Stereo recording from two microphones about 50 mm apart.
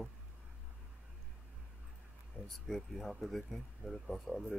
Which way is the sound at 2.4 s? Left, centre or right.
Centre.